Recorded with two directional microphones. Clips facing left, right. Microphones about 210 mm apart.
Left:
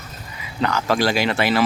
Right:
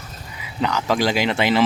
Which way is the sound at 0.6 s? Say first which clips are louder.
Even; 15° right (ahead or behind).